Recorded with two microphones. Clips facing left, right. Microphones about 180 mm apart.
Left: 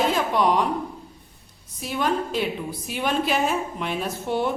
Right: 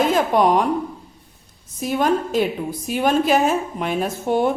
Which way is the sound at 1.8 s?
45° right (ahead or behind).